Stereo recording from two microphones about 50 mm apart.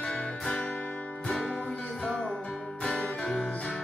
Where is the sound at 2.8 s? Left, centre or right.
Centre.